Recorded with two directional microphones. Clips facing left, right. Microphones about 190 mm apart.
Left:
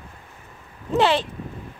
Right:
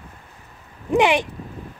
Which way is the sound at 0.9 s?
15° right (ahead or behind).